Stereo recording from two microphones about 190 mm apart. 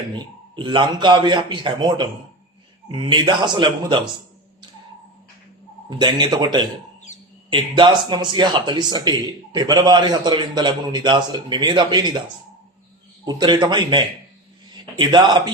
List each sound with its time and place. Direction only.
0.2 s speech: 25° right (ahead or behind)
6.0 s speech: 25° right (ahead or behind)
13.2 s speech: 25° right (ahead or behind)